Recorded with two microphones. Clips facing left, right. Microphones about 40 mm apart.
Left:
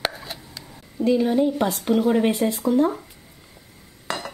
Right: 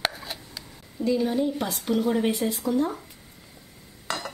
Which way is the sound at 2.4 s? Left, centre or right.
Centre.